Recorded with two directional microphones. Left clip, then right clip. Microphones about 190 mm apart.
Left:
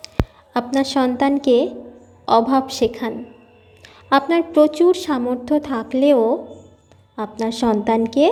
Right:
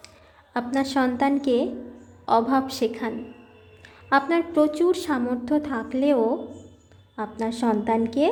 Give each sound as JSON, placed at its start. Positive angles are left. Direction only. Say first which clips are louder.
{"t": 0.5, "sound": "a woman's voice", "louder": "left 5 dB", "side_deg": 20}